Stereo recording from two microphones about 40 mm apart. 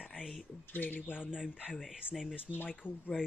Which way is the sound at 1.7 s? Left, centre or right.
Centre.